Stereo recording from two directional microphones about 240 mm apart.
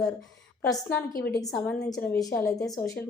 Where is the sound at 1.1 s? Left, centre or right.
Left.